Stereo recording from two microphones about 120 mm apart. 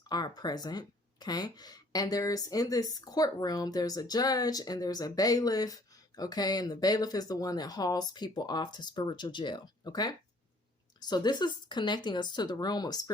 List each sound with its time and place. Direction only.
0.1 s speech: 35° left (ahead or behind)